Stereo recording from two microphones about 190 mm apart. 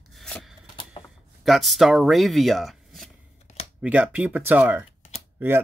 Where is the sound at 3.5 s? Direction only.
35° left (ahead or behind).